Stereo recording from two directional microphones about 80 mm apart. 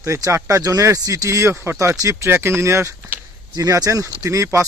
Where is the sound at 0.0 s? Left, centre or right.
Right.